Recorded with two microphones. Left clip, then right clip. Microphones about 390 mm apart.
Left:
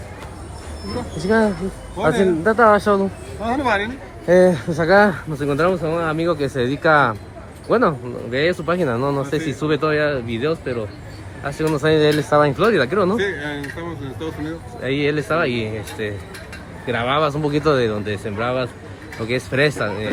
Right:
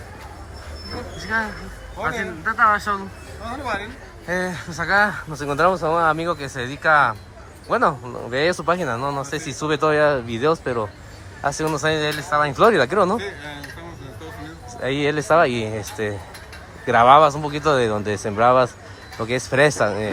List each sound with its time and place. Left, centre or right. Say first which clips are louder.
1.2 s speech: left 6 dB; centre
14.8 s speech: right 1 dB; centre
15.7 s speech: even; right
17.1 s speech: right 5 dB; centre
18.1 s speech: right 3 dB; right
18.4 s a man's voice: right 9 dB; centre